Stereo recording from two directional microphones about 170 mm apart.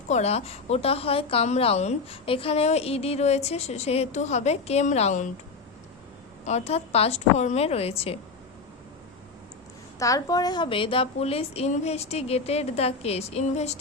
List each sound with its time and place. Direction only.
0.1 s a woman's voice: 40° left (ahead or behind)
6.4 s a woman's voice: 40° left (ahead or behind)
10.0 s a woman's voice: 20° left (ahead or behind); by 13.7 s 40° left (ahead or behind)